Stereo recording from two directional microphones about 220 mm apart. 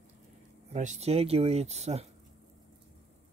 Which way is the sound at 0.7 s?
30° right (ahead or behind).